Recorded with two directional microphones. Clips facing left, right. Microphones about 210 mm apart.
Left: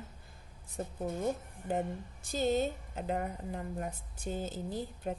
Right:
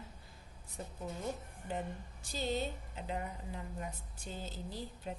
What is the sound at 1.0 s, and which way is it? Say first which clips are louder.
A woman's voice: left 7 dB; 50° left (ahead or behind).